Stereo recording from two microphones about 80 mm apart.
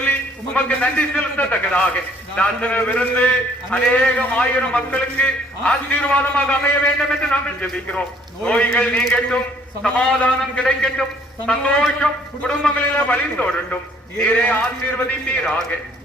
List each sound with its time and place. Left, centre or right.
0.0 s a man's voice: left